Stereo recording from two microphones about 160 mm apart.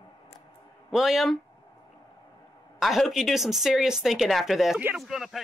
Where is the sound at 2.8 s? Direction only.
Centre (ahead or behind).